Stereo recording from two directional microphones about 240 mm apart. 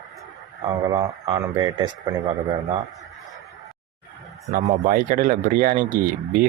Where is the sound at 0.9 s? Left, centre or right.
Centre.